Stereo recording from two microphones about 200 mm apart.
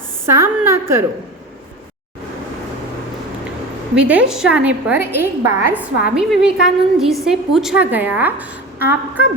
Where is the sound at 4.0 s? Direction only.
5° right (ahead or behind).